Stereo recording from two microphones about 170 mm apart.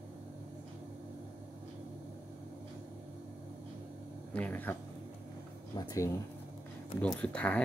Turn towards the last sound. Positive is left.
turn(degrees=10)  # may be behind; listen again after turning